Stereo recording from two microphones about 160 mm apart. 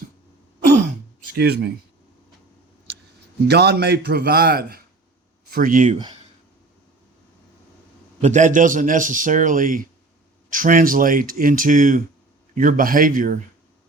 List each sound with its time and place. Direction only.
1.4 s speech: 85° right
3.4 s a man's voice: 90° right; by 4.8 s 75° right (ahead or behind)
5.5 s speech: 60° right (ahead or behind)
8.2 s a man's voice: 50° right (ahead or behind)